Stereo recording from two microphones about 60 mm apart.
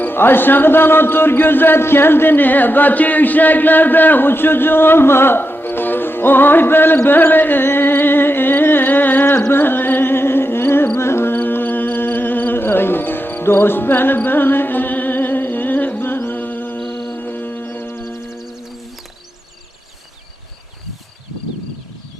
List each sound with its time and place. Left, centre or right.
0.0 s speech: left
9.5 s music: left
16.8 s music: centre
17.2 s music: left